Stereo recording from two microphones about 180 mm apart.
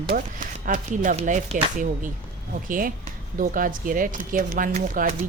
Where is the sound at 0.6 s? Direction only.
45° right (ahead or behind).